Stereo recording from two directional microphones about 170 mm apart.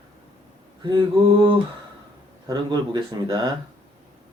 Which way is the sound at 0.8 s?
30° right (ahead or behind).